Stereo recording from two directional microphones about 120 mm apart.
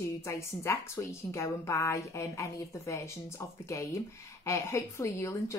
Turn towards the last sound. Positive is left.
turn(degrees=25)  # may be behind; listen again after turning